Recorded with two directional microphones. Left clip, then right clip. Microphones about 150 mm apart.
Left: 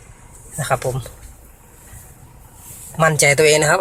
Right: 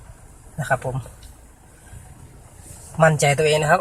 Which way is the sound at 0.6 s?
Centre (ahead or behind).